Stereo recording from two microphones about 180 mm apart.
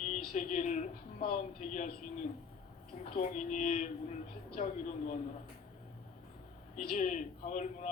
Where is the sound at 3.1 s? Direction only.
45° left (ahead or behind).